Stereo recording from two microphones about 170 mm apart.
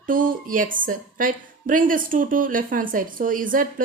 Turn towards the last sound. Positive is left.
turn(degrees=-55)  # may be behind; listen again after turning